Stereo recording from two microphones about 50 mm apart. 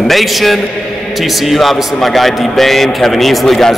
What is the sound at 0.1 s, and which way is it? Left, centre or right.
A man's voice, centre.